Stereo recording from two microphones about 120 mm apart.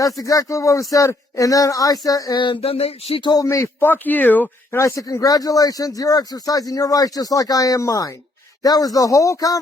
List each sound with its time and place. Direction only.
0.0 s speech: 30° left (ahead or behind); by 3.2 s 55° left (ahead or behind)
3.2 s speech: 30° left (ahead or behind)